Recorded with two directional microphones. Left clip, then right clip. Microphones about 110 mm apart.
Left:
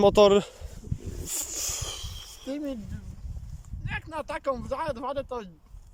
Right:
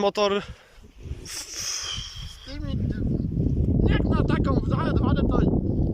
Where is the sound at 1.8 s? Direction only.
40° left (ahead or behind).